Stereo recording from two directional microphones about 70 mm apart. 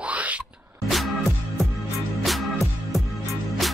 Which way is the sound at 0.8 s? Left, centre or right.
Centre.